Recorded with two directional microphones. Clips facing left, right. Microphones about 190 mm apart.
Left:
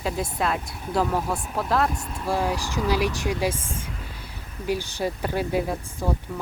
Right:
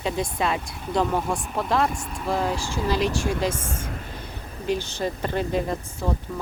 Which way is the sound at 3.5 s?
55° right (ahead or behind).